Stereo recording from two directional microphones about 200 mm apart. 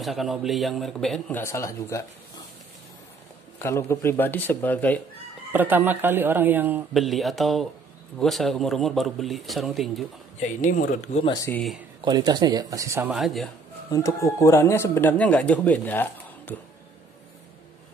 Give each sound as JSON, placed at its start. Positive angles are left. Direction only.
{"t": 0.0, "sound": "speech", "side_deg": 0}
{"t": 1.4, "sound": "speech", "side_deg": 15}
{"t": 3.5, "sound": "speech", "side_deg": 10}
{"t": 5.5, "sound": "a man's voice", "side_deg": -10}
{"t": 10.4, "sound": "speech", "side_deg": 40}
{"t": 11.4, "sound": "speech", "side_deg": 5}
{"t": 12.0, "sound": "a man's voice", "side_deg": -20}
{"t": 13.8, "sound": "speech", "side_deg": 15}